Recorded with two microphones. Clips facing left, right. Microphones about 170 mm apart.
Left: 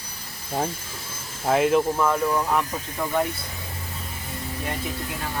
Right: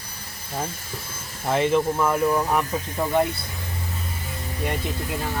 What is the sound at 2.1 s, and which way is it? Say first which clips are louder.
Speech: right 1 dB; 10° right (ahead or behind).